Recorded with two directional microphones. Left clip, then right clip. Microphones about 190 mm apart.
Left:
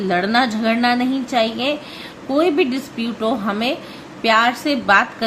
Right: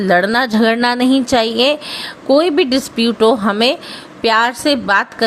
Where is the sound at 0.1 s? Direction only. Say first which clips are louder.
Right 4 dB; 55° right (ahead or behind).